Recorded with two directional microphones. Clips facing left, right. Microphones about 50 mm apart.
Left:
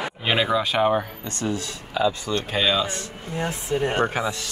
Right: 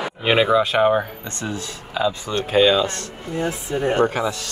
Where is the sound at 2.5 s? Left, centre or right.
Centre.